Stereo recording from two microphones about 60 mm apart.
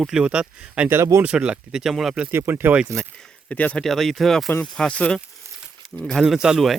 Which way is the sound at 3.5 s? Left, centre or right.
Left.